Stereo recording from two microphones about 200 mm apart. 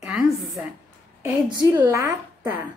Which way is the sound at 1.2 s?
15° right (ahead or behind).